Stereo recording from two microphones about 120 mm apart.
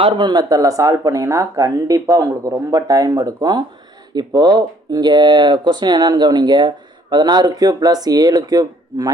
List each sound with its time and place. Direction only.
0.0 s speech: 40° right (ahead or behind)